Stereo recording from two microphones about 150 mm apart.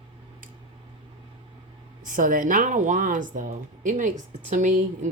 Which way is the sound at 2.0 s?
65° right (ahead or behind).